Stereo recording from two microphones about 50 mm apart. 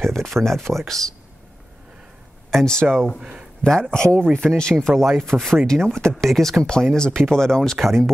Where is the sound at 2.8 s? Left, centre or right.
Right.